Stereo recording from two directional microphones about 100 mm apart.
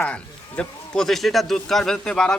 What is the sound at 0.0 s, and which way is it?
A man's voice, 10° left (ahead or behind).